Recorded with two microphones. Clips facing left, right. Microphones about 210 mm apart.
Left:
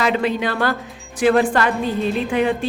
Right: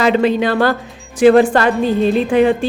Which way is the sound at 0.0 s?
30° right (ahead or behind).